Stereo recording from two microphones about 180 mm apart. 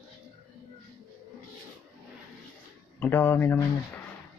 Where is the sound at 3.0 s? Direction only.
10° left (ahead or behind).